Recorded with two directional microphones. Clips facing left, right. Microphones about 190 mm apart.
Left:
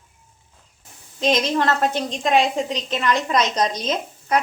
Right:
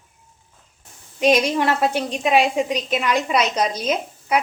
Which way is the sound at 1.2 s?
10° right (ahead or behind).